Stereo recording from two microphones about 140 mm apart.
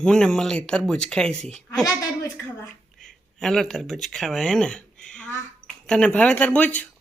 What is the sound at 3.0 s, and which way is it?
Speech, 5° left (ahead or behind).